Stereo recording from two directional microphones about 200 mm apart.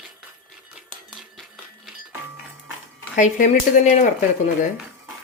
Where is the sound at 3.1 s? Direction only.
40° left (ahead or behind).